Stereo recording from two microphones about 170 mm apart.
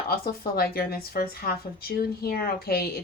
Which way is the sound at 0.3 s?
65° left (ahead or behind).